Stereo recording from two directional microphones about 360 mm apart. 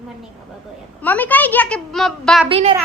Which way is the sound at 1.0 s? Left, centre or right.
Centre.